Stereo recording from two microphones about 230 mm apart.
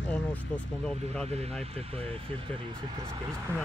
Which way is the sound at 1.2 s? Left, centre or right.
Right.